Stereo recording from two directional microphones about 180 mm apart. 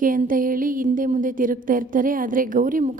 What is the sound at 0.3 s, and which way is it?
A woman's voice, 50° right (ahead or behind).